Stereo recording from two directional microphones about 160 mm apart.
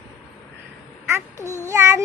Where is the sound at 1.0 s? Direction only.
15° right (ahead or behind).